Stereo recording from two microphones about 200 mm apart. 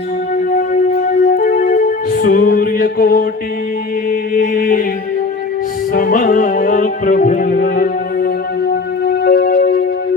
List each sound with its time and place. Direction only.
1.2 s music: 45° left (ahead or behind)
4.4 s mantra: 45° left (ahead or behind)
5.9 s music: 45° left (ahead or behind)